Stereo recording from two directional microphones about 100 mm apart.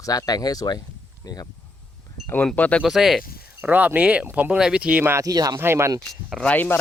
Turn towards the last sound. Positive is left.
turn(degrees=15)  # may be behind; listen again after turning